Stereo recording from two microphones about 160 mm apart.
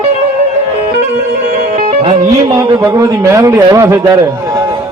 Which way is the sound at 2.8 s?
20° right (ahead or behind).